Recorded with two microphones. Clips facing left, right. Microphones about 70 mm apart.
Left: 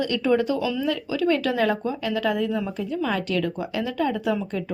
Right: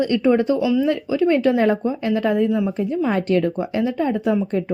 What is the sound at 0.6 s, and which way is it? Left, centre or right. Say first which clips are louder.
Speech: right 7 dB; centre.